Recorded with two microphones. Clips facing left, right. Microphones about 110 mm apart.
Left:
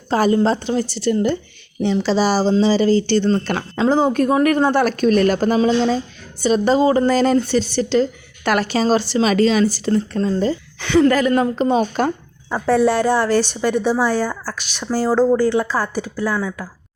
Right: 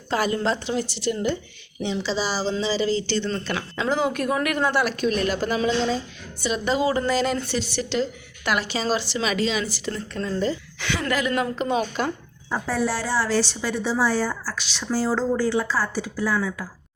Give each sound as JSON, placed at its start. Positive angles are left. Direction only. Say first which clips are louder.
{"t": 0.1, "sound": "a woman's voice", "louder": "left 7 dB", "side_deg": 35}
{"t": 10.2, "sound": "a woman's voice", "louder": "left 6 dB", "side_deg": 30}
{"t": 12.5, "sound": "a woman's voice", "louder": "left 9 dB", "side_deg": 65}